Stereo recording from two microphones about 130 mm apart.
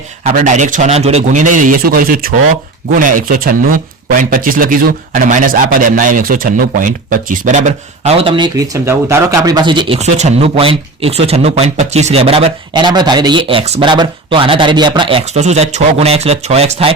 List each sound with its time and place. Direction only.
0.3 s a man's voice: 70° right (ahead or behind); by 8.4 s 45° right (ahead or behind)
8.5 s speech: 25° right (ahead or behind)
10.0 s speech: 60° right (ahead or behind)
12.7 s speech: 35° right (ahead or behind)
15.2 s speech: 60° right (ahead or behind)